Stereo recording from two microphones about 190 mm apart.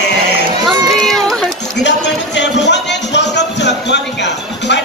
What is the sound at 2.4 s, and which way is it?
Music, 65° left (ahead or behind).